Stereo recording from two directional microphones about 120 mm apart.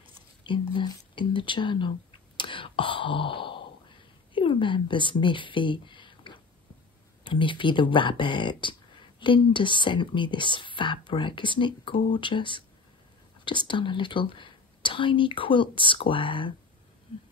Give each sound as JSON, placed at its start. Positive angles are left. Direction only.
{"t": 0.4, "sound": "speech", "side_deg": 40}
{"t": 2.3, "sound": "sigh", "side_deg": 45}
{"t": 4.3, "sound": "speech", "side_deg": 45}